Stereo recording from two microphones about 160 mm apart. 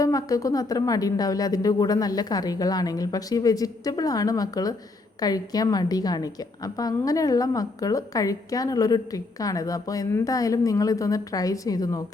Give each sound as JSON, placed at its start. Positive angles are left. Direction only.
{"t": 0.0, "sound": "a woman's voice", "side_deg": 20}